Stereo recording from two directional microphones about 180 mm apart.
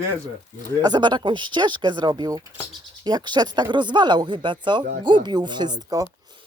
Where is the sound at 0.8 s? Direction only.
25° right (ahead or behind).